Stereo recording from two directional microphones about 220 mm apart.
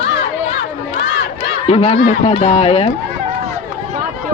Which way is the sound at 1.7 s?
30° left (ahead or behind).